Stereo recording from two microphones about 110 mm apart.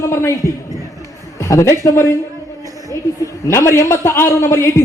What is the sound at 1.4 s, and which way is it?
Speech, 25° left (ahead or behind).